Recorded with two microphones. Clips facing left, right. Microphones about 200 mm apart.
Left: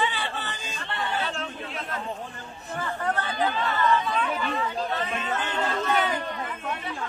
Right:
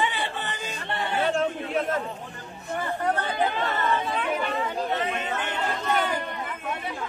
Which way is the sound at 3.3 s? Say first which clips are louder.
Even; 25° right (ahead or behind).